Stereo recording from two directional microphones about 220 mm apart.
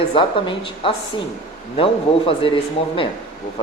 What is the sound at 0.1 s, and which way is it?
Speech, 25° left (ahead or behind).